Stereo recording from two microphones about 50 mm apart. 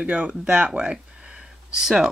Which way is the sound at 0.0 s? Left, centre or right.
Right.